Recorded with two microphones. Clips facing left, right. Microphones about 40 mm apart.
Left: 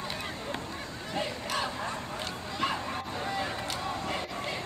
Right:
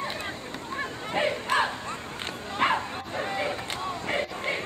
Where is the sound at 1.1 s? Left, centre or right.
Right.